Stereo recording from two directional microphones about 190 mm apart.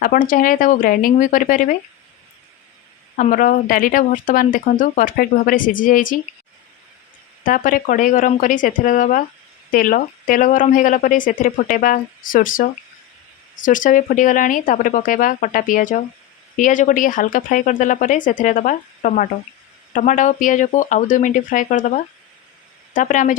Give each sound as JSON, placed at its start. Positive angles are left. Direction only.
{"t": 0.0, "sound": "speech", "side_deg": 45}
{"t": 3.2, "sound": "speech", "side_deg": 45}
{"t": 7.4, "sound": "speech", "side_deg": 45}